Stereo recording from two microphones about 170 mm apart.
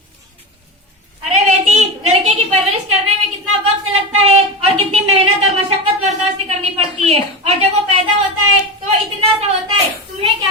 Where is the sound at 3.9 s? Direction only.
35° right (ahead or behind).